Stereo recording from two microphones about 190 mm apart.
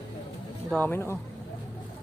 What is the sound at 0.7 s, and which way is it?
Speech, 10° left (ahead or behind).